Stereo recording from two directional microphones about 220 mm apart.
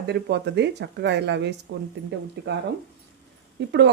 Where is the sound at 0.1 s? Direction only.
50° right (ahead or behind).